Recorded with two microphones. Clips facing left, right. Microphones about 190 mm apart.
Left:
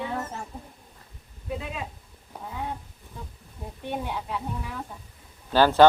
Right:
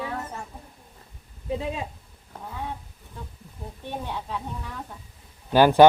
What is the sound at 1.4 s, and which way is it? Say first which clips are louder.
Speech: right 4 dB; 30° right (ahead or behind).